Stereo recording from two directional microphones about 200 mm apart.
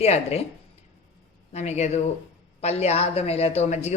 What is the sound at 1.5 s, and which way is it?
Speech, 35° left (ahead or behind).